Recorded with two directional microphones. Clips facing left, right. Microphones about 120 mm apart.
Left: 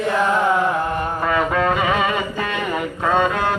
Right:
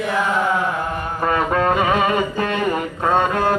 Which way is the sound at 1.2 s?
35° right (ahead or behind).